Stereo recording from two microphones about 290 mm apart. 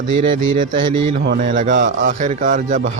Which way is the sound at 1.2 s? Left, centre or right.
Right.